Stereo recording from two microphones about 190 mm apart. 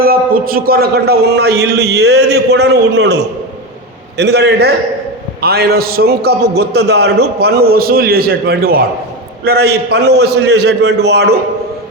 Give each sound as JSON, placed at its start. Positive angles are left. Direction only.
{"t": 0.0, "sound": "a man's voice", "side_deg": -50}
{"t": 4.2, "sound": "a man's voice", "side_deg": -60}